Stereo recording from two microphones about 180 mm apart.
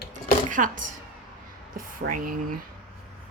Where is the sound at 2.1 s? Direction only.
50° right (ahead or behind).